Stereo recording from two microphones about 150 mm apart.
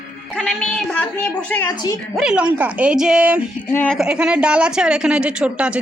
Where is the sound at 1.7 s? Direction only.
25° left (ahead or behind).